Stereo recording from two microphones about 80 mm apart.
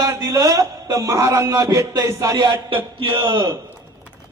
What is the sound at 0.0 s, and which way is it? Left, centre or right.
A man's voice, right.